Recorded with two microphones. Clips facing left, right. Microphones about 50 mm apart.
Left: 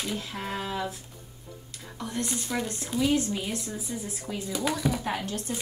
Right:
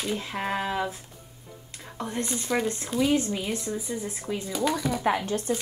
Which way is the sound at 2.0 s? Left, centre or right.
Right.